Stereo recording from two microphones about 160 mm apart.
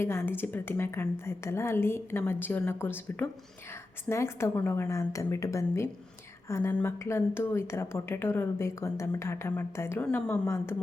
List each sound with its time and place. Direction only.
0.0 s a woman's voice: 15° left (ahead or behind)